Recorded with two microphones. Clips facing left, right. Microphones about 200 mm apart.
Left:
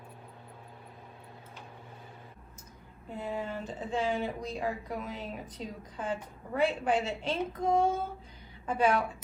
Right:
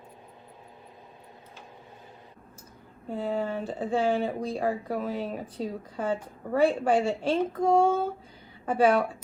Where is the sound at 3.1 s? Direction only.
30° right (ahead or behind).